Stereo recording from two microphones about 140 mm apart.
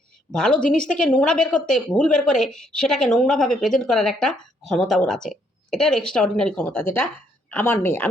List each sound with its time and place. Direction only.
0.3 s a woman's voice: 5° left (ahead or behind)